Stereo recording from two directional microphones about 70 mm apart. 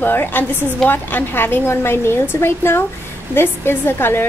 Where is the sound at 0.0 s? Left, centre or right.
Left.